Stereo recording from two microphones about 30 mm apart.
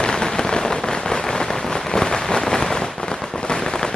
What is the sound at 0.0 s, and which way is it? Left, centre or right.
Rain on surface, left.